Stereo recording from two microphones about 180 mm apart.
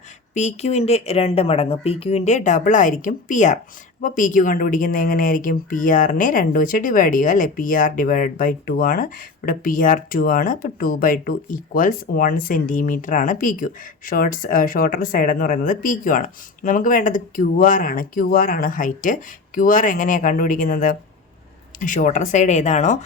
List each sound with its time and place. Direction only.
0.3 s a woman's voice: 40° left (ahead or behind)